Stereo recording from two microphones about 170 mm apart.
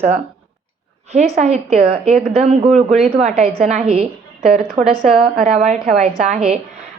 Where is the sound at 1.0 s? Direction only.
40° right (ahead or behind).